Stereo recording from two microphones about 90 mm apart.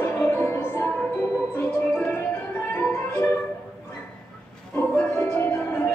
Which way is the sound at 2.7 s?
25° left (ahead or behind).